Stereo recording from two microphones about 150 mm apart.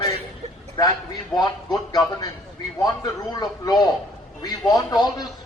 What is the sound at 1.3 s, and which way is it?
Speech, 25° left (ahead or behind).